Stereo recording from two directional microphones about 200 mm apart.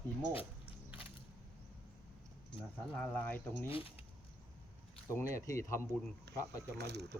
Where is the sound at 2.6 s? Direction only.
5° left (ahead or behind).